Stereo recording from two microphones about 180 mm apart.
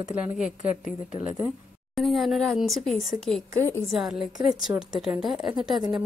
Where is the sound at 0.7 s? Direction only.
40° left (ahead or behind).